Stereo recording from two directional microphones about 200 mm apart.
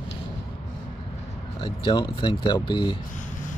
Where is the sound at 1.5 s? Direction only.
25° left (ahead or behind).